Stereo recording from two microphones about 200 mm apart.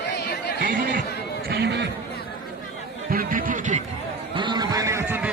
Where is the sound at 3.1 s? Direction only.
45° right (ahead or behind).